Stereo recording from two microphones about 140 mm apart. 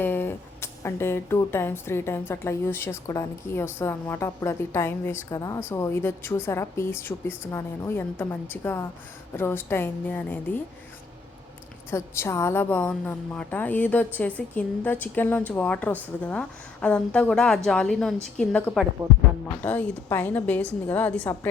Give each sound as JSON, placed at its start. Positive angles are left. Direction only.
{"t": 0.0, "sound": "speech", "side_deg": 15}
{"t": 11.9, "sound": "speech", "side_deg": 20}
{"t": 19.0, "sound": "speech", "side_deg": -20}
{"t": 19.6, "sound": "speech", "side_deg": 10}